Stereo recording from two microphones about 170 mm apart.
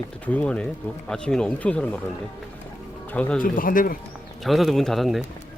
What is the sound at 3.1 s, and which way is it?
Speech, 10° left (ahead or behind).